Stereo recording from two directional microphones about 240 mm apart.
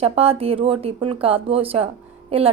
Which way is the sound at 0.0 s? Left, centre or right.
Right.